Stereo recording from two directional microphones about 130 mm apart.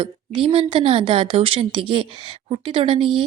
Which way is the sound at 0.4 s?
45° right (ahead or behind).